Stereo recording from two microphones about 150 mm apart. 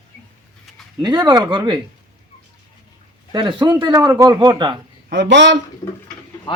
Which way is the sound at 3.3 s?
30° right (ahead or behind).